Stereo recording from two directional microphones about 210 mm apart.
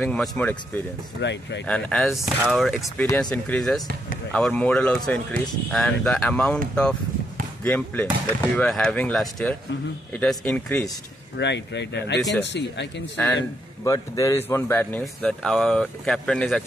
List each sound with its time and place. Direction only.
0.0 s speech: 5° left (ahead or behind)
1.2 s speech: 55° left (ahead or behind)
1.7 s speech: centre (ahead or behind)
2.8 s speech: 15° left (ahead or behind)
11.3 s speech: 55° left (ahead or behind)
12.2 s speech: centre (ahead or behind)
12.4 s speech: 55° left (ahead or behind)
13.1 s speech: 10° left (ahead or behind)